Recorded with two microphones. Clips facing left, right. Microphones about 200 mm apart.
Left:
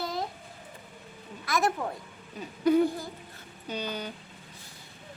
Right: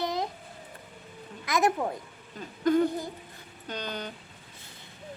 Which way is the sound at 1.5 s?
20° right (ahead or behind).